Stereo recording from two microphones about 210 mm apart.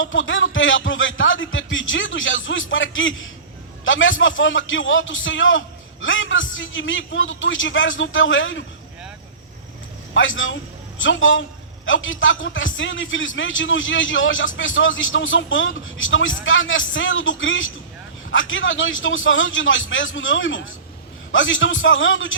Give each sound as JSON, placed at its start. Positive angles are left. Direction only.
{"t": 0.0, "sound": "a sound", "side_deg": 65}
{"t": 3.8, "sound": "a man's voice", "side_deg": 65}
{"t": 10.2, "sound": "a man's voice", "side_deg": 65}